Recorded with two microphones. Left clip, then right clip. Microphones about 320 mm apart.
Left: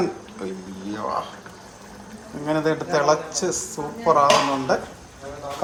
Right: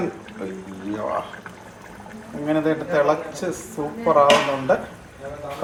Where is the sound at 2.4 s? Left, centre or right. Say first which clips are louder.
Right 1 dB; centre.